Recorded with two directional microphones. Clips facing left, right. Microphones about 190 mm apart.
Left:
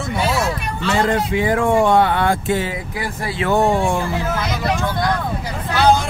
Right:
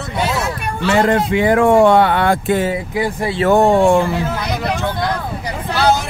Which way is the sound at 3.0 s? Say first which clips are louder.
Right 7 dB; 20° right (ahead or behind).